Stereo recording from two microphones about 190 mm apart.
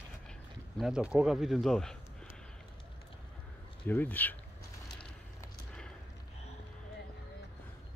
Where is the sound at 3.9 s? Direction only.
10° left (ahead or behind).